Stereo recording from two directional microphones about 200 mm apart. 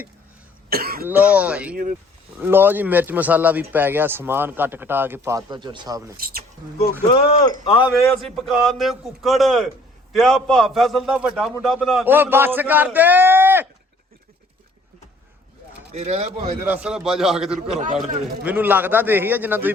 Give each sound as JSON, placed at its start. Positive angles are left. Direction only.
{"t": 0.7, "sound": "speech", "side_deg": -50}
{"t": 1.0, "sound": "speech", "side_deg": -10}
{"t": 1.7, "sound": "speech", "side_deg": -45}
{"t": 2.4, "sound": "speech", "side_deg": -10}
{"t": 6.1, "sound": "speech", "side_deg": -50}
{"t": 7.1, "sound": "speech", "side_deg": 25}
{"t": 8.2, "sound": "a man's voice", "side_deg": 0}
{"t": 15.9, "sound": "speech", "side_deg": -30}
{"t": 16.6, "sound": "a man's voice", "side_deg": -10}